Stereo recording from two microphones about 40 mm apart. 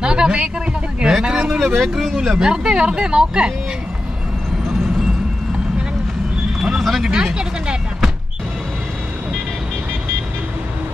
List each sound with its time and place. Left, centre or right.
0.0 s a sound: right
1.0 s vehicle: centre
1.6 s speech: centre
2.1 s speech: centre
6.8 s speech: centre
7.3 s vehicle: centre